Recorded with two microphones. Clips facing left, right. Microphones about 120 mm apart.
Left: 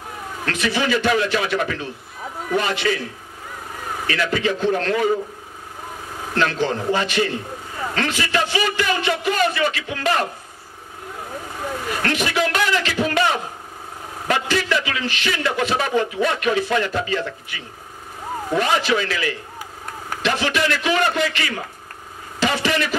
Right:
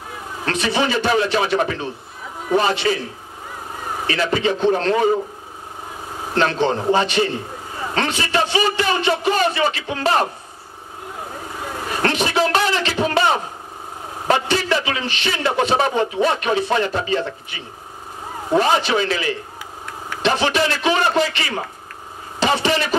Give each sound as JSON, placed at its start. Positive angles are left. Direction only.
{"t": 0.5, "sound": "a man's voice", "side_deg": -30}
{"t": 4.1, "sound": "a man's voice", "side_deg": -30}
{"t": 6.3, "sound": "a man's voice", "side_deg": -30}
{"t": 11.9, "sound": "a sound", "side_deg": -30}
{"t": 14.2, "sound": "a man's voice", "side_deg": -30}